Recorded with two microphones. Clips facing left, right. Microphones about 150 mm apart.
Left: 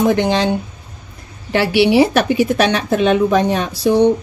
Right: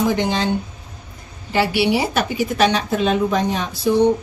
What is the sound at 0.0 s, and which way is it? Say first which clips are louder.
Speech: left 5 dB; 65° left (ahead or behind).